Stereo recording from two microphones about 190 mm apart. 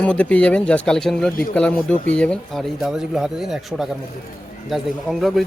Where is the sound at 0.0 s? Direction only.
5° left (ahead or behind).